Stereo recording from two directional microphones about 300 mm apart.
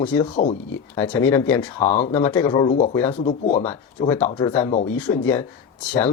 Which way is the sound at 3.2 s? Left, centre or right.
Left.